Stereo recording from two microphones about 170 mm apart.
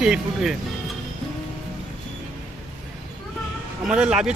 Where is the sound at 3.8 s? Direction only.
5° right (ahead or behind).